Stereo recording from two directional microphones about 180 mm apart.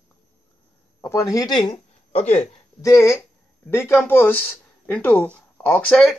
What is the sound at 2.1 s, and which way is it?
Speech, 35° left (ahead or behind).